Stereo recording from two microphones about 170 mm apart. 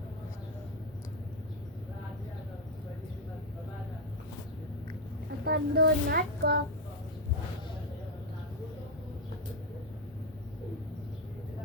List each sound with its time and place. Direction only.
5.5 s a child's voice: 70° right (ahead or behind)